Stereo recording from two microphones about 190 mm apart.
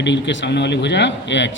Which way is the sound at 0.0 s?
70° left (ahead or behind).